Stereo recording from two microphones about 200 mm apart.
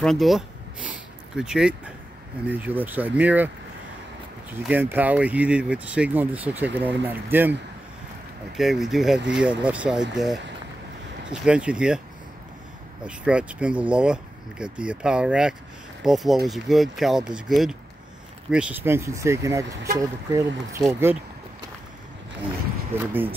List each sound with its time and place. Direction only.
0.0 s speech: centre (ahead or behind)
4.6 s speech: 10° right (ahead or behind)
8.5 s speech: centre (ahead or behind)
13.0 s speech: 5° right (ahead or behind)
22.9 s speech: 10° right (ahead or behind)